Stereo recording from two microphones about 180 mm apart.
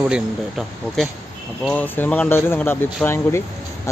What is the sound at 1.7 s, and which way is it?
Speech, 10° left (ahead or behind).